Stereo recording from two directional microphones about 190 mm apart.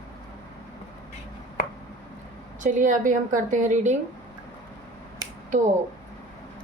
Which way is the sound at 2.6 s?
45° right (ahead or behind).